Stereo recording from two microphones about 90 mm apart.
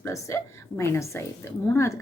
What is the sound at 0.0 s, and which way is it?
A woman's voice, 30° left (ahead or behind).